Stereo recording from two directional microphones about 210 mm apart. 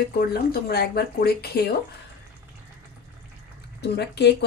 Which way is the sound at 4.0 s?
50° left (ahead or behind).